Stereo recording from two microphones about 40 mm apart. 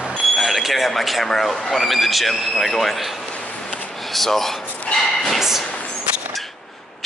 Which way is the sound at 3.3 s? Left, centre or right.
Left.